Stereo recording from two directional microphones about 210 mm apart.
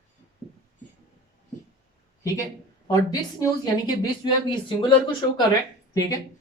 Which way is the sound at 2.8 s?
15° left (ahead or behind).